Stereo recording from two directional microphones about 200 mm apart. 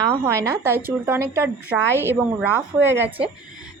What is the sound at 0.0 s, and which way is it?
Speech, 15° right (ahead or behind).